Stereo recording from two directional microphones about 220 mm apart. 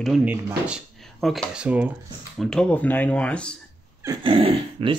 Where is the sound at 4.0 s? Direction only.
20° right (ahead or behind).